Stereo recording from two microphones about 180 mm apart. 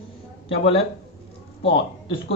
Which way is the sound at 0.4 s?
30° left (ahead or behind).